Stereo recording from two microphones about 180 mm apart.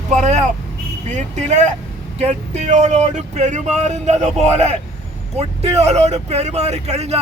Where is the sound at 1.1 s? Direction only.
40° right (ahead or behind).